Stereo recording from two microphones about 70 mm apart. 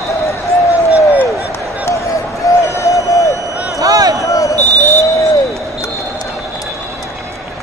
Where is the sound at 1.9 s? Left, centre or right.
Left.